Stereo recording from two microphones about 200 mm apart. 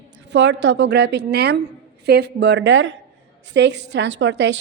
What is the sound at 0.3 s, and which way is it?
A woman's voice, 60° right (ahead or behind).